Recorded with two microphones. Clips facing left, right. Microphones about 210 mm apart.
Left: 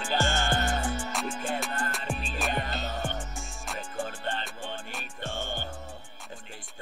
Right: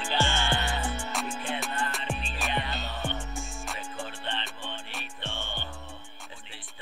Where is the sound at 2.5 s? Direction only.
45° left (ahead or behind).